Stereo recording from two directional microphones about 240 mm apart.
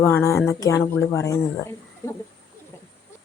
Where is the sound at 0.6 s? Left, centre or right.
Centre.